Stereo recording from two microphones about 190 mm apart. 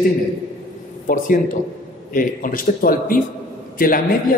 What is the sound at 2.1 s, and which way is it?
A man's voice, 45° left (ahead or behind).